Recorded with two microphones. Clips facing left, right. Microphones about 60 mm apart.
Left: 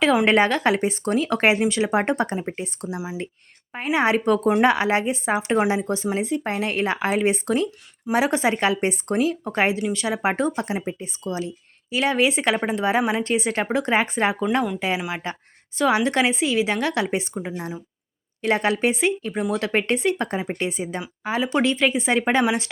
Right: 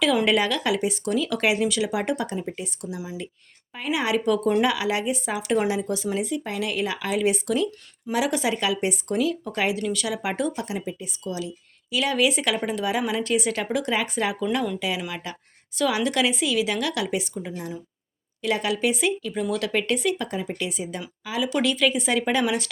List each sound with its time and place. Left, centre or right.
0.3 s speech: left
3.9 s speech: left
9.7 s speech: left